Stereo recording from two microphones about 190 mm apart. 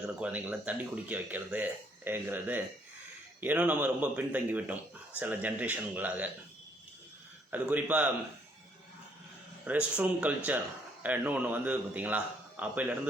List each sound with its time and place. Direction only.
0.2 s speech: 10° right (ahead or behind)
7.5 s speech: 5° right (ahead or behind)
9.6 s speech: 5° right (ahead or behind)